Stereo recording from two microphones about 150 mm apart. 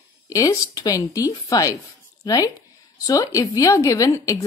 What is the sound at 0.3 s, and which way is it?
A woman's voice, 25° left (ahead or behind).